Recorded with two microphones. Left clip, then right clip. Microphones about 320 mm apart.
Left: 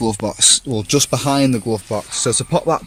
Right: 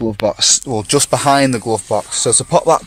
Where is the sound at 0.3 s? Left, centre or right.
Centre.